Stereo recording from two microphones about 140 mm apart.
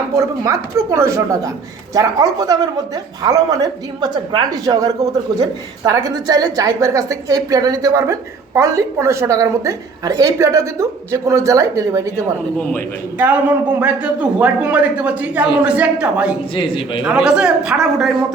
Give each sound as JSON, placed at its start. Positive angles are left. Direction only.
{"t": 0.2, "sound": "a woman's voice", "side_deg": -25}
{"t": 12.5, "sound": "a man's voice", "side_deg": 10}
{"t": 13.1, "sound": "a man's voice", "side_deg": -10}
{"t": 16.6, "sound": "a man's voice", "side_deg": 40}
{"t": 17.2, "sound": "a woman's voice", "side_deg": -5}